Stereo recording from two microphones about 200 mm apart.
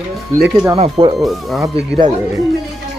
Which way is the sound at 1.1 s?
Centre (ahead or behind).